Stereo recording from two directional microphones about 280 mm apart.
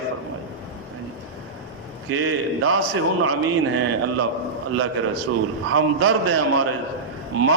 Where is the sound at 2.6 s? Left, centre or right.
Right.